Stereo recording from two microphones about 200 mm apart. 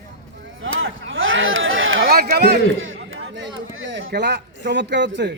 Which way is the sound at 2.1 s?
50° right (ahead or behind).